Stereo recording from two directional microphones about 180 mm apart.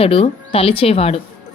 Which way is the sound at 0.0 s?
35° left (ahead or behind).